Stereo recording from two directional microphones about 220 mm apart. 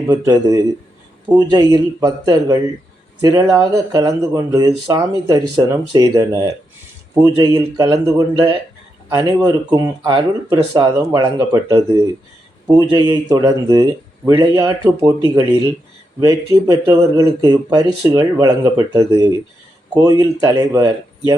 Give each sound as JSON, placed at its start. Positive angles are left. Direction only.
{"t": 0.1, "sound": "speech", "side_deg": -20}
{"t": 16.2, "sound": "speech", "side_deg": -15}